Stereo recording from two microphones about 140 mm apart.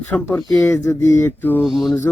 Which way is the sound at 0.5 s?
20° left (ahead or behind).